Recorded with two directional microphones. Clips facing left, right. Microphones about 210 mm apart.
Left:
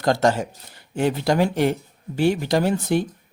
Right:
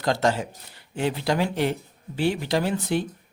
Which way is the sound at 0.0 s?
45° left (ahead or behind).